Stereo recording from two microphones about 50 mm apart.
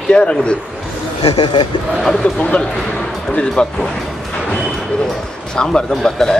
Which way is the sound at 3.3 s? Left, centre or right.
Centre.